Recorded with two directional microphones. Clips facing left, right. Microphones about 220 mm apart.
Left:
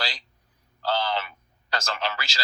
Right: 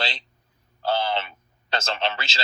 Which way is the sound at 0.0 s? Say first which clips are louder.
Right 3 dB; 25° right (ahead or behind).